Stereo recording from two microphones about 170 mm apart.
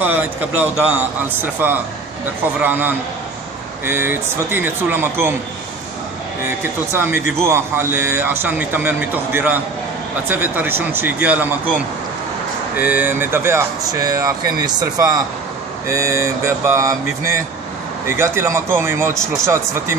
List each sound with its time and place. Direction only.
0.0 s speech: 10° right (ahead or behind)
6.6 s speech: 10° right (ahead or behind)
12.7 s speech: 10° right (ahead or behind)